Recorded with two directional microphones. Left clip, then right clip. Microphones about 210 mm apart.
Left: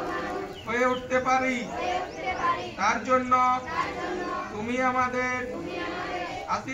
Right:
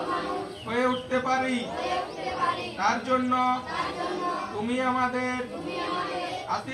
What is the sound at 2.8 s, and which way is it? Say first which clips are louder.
Speech: left 1 dB; 25° left (ahead or behind).